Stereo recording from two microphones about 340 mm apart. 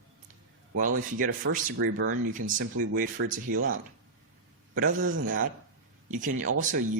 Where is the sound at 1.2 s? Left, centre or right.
Right.